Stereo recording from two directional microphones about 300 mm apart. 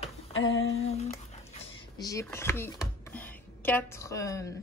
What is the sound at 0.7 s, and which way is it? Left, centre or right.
Speech, left.